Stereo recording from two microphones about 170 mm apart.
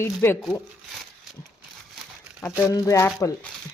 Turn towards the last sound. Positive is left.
turn(degrees=15)  # may be behind; listen again after turning